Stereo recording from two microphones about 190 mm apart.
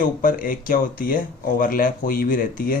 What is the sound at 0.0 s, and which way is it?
Speech, 45° left (ahead or behind).